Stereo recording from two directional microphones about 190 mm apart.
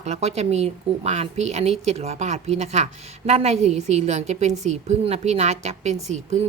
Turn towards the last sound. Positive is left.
turn(degrees=-35)  # may be behind; listen again after turning